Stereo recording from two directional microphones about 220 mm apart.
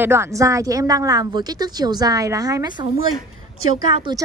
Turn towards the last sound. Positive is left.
turn(degrees=-20)  # may be behind; listen again after turning